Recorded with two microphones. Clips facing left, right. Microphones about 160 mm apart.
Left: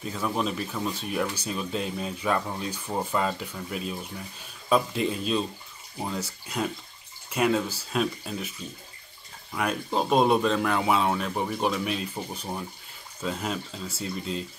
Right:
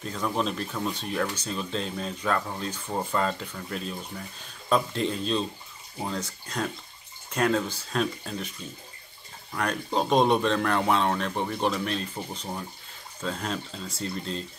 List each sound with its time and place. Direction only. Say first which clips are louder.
0.0 s speech: even; 5° left (ahead or behind)
9.5 s speech: left 1 dB; 5° left (ahead or behind)